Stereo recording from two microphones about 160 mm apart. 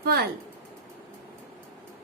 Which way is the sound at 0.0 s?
80° right.